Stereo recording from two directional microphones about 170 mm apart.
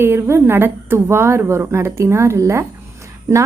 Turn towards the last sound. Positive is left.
turn(degrees=-15)  # may be behind; listen again after turning